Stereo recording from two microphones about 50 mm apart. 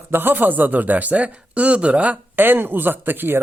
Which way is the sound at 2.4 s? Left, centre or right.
Right.